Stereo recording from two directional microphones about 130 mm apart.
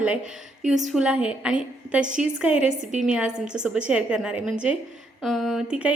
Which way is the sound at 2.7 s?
65° right (ahead or behind).